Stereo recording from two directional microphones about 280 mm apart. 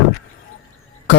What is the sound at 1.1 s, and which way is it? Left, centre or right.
Cough, left.